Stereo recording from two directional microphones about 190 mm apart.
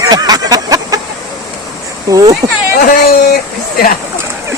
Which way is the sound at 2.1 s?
20° right (ahead or behind).